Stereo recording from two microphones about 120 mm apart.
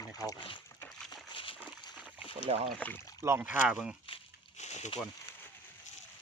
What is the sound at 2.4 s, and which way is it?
Speech, 60° right (ahead or behind).